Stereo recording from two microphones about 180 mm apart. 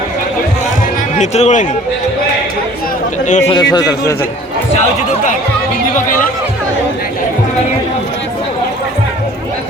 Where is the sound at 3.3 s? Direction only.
40° left (ahead or behind).